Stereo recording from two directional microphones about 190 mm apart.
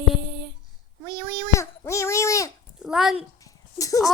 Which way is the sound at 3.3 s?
15° left (ahead or behind).